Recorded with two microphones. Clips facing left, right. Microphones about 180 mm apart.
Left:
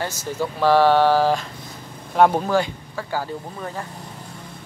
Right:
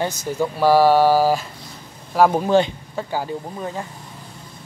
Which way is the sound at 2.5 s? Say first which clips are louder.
Right 4 dB; 25° right (ahead or behind).